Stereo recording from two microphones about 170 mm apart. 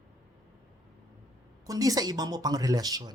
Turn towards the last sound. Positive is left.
turn(degrees=-20)  # may be behind; listen again after turning